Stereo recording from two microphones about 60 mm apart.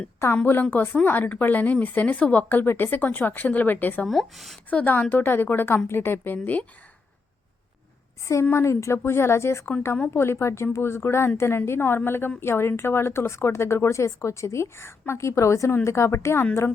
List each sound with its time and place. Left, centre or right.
0.4 s a woman's voice: left
2.5 s speech: left
4.0 s speech: centre
4.7 s a woman's voice: left
8.2 s a woman's voice: left